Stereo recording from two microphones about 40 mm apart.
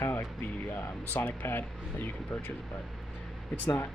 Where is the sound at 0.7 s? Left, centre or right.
Left.